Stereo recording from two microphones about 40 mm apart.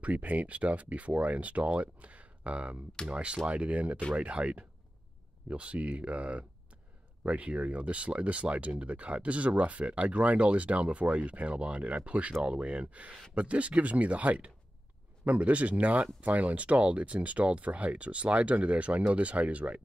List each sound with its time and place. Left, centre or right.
0.0 s speech: right